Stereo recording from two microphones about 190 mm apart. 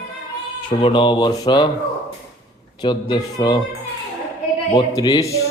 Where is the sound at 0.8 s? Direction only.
25° left (ahead or behind).